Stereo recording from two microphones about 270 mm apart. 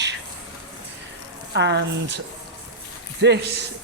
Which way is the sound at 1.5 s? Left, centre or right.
Right.